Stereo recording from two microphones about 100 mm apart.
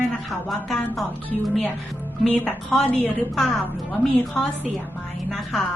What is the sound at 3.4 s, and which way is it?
Speech, 5° left (ahead or behind).